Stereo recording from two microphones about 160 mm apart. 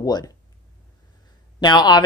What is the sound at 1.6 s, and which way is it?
Speech, 25° left (ahead or behind).